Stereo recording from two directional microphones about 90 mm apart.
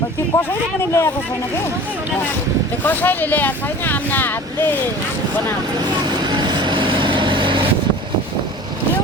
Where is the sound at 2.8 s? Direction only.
20° left (ahead or behind).